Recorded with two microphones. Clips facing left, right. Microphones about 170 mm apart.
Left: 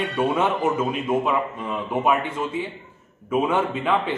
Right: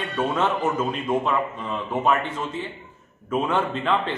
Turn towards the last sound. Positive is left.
turn(degrees=10)  # may be behind; listen again after turning